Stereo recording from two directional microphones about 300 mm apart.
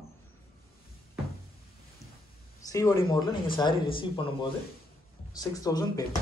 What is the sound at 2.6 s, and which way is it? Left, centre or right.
Speech, centre.